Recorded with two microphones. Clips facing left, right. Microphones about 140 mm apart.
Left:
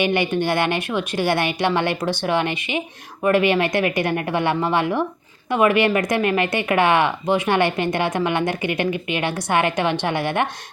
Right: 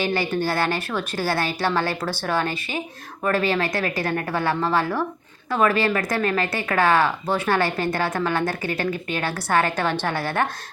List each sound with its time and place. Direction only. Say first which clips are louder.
0.1 s a woman's voice: left 3 dB; 20° left (ahead or behind)